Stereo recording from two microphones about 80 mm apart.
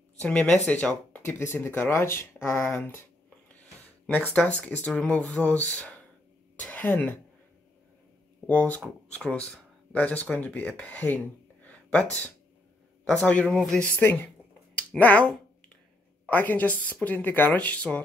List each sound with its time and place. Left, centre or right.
0.2 s speech: centre
1.2 s speech: left
4.1 s speech: left
8.5 s speech: centre
13.8 s speech: left
16.3 s speech: left